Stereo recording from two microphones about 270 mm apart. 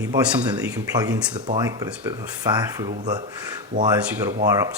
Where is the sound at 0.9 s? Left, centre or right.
Centre.